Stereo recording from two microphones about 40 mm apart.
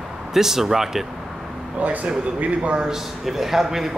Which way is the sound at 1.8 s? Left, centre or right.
Right.